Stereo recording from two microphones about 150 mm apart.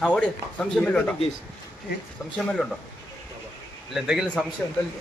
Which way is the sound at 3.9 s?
5° right (ahead or behind).